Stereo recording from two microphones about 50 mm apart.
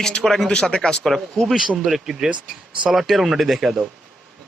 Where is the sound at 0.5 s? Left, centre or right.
Centre.